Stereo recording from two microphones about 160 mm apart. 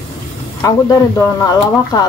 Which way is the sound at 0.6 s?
20° left (ahead or behind).